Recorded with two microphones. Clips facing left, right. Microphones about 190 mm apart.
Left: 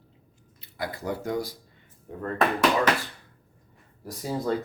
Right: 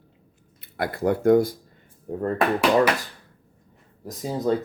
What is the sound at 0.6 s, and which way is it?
Speech, 55° right (ahead or behind).